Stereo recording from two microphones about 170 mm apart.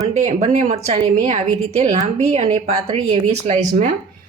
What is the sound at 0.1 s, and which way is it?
A woman's voice, 40° right (ahead or behind).